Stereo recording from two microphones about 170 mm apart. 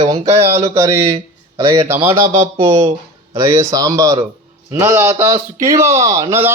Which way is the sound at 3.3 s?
20° right (ahead or behind).